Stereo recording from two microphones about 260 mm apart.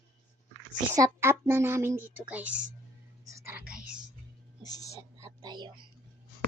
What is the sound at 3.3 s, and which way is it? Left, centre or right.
Whispering, centre.